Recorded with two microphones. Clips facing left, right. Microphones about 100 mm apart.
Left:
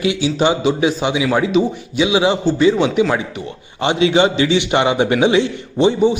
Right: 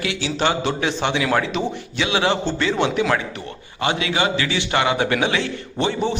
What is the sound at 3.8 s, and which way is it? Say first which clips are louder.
A man's voice: left 7 dB; 25° left (ahead or behind).